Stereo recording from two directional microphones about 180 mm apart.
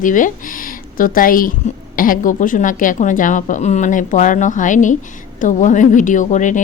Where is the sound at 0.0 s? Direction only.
45° left (ahead or behind).